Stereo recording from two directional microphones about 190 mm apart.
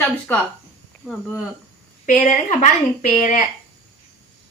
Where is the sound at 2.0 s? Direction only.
45° left (ahead or behind).